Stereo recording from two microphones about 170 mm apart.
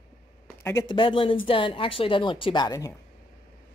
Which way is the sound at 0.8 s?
30° left (ahead or behind).